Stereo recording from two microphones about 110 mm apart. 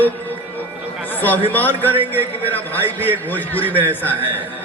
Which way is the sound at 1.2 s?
15° left (ahead or behind).